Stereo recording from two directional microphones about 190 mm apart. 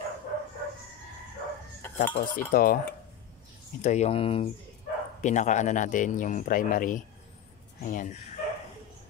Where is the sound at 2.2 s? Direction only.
45° left (ahead or behind).